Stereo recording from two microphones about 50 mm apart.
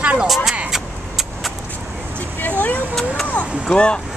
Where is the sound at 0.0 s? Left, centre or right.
Right.